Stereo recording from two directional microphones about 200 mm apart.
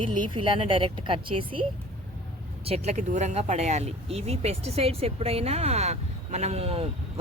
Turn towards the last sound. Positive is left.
turn(degrees=-30)  # may be behind; listen again after turning